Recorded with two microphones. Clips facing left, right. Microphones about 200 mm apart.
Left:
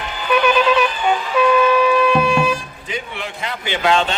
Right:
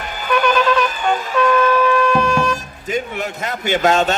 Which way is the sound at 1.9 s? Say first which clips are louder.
Left 1 dB; 5° left (ahead or behind).